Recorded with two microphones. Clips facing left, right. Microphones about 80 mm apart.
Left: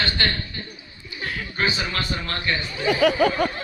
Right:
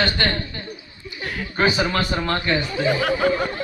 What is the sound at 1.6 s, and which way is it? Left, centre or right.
Speech, right.